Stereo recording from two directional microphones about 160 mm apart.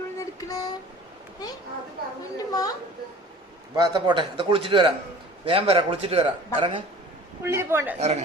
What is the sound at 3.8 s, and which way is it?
A man's voice, 30° right (ahead or behind).